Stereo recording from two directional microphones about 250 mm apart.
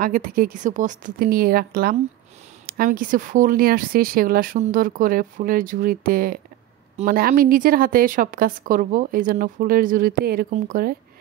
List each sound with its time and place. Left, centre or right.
0.0 s a woman's voice: right